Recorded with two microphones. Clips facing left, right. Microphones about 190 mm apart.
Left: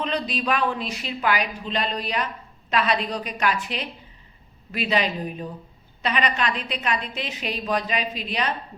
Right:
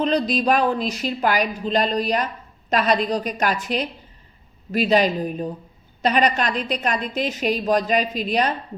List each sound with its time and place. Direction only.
0.0 s a woman's voice: 40° right (ahead or behind)